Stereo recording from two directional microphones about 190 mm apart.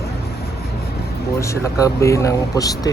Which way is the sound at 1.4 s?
15° left (ahead or behind).